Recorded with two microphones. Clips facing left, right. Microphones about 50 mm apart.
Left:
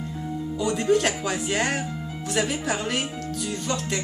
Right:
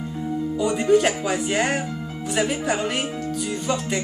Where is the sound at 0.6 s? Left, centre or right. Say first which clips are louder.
Right 3 dB; centre.